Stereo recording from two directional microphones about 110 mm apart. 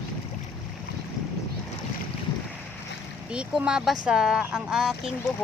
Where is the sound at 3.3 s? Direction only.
10° right (ahead or behind).